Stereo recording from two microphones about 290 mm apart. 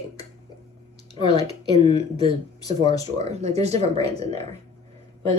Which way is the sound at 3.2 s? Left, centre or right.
Right.